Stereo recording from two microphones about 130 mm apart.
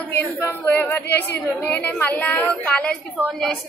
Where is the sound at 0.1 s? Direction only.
15° left (ahead or behind).